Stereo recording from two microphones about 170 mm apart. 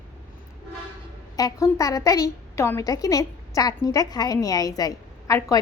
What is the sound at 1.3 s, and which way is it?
A woman's voice, 20° left (ahead or behind).